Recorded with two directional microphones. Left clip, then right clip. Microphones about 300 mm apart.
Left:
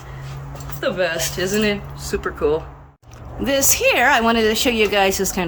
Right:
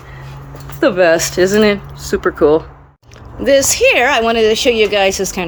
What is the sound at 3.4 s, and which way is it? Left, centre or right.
Speech, centre.